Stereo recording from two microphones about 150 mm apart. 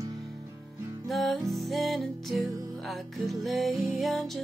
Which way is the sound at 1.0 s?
Centre (ahead or behind).